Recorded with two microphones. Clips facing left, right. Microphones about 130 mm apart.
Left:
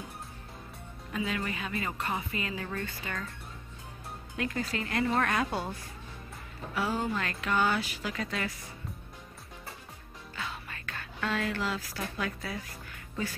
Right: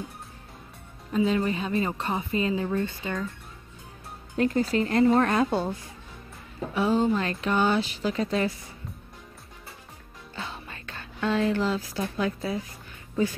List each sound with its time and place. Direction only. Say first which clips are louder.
1.1 s speech: right 9 dB; 25° right (ahead or behind)
4.4 s a woman's voice: right 10 dB; 35° right (ahead or behind)
6.7 s speech: right 8 dB; 20° right (ahead or behind)
10.3 s speech: right 2 dB; 25° right (ahead or behind)